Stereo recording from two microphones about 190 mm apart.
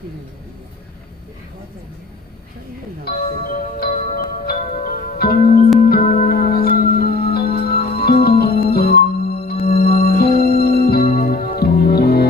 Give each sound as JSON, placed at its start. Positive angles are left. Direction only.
{"t": 3.1, "sound": "music", "side_deg": 50}